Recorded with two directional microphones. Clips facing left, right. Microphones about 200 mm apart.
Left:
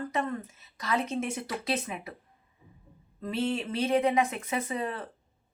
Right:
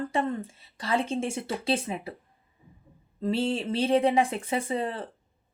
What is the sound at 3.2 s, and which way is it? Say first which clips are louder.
Speech: right 3 dB; 30° right (ahead or behind).